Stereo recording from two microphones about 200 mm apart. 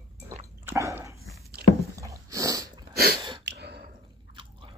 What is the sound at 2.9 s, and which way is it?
Sneeze, 50° right (ahead or behind).